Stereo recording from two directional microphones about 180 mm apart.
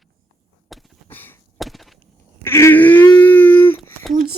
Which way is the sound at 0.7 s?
Centre (ahead or behind).